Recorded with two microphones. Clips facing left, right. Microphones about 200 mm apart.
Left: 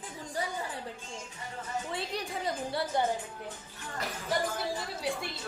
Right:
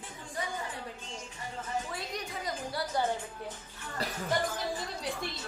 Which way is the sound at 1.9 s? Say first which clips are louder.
Left 3 dB; 25° left (ahead or behind).